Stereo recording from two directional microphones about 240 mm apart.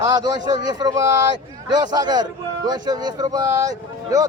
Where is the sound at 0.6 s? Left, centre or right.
Centre.